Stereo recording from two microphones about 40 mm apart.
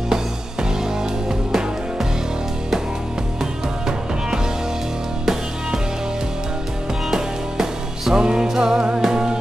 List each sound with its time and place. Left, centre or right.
0.1 s music: centre
5.2 s music: centre
7.2 s music: centre